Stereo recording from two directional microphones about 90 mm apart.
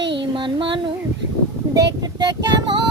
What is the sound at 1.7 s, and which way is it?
Child singing, 50° right (ahead or behind).